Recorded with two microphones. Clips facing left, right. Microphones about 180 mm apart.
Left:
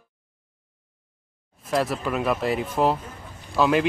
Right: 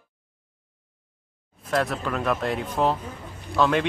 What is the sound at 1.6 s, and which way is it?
Speech, centre (ahead or behind).